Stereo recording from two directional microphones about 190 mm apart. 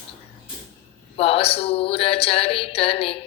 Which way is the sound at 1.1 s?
30° left (ahead or behind).